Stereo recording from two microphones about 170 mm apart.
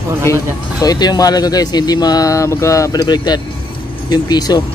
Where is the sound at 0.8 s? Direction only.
20° left (ahead or behind).